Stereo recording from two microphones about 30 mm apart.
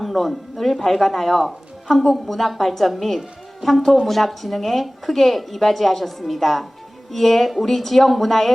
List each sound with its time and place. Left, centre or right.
0.0 s a woman's voice: centre